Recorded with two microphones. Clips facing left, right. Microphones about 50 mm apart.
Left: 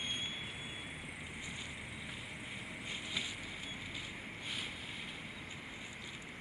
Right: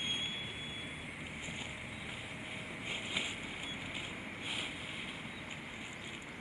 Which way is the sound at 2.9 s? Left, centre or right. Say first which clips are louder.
Right 3 dB; right.